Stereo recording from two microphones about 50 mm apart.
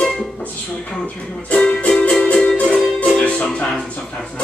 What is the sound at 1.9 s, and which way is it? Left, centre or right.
Music, centre.